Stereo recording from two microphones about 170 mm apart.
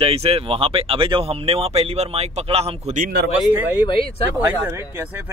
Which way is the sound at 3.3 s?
10° right (ahead or behind).